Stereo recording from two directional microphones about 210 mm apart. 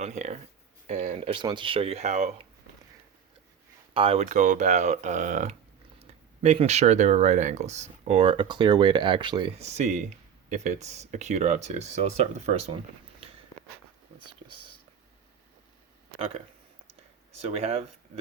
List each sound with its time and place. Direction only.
0.0 s speech: 35° right (ahead or behind)
3.9 s speech: 25° right (ahead or behind)
16.1 s speech: 30° right (ahead or behind)